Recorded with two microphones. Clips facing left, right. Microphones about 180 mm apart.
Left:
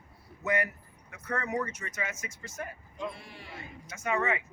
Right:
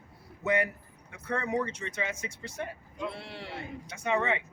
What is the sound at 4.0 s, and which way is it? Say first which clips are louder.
Speech: right 2 dB; 25° right (ahead or behind).